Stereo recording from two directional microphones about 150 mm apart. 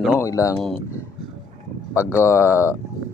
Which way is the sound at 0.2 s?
20° left (ahead or behind).